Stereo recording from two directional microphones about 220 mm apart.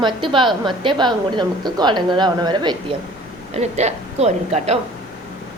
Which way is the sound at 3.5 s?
30° right (ahead or behind).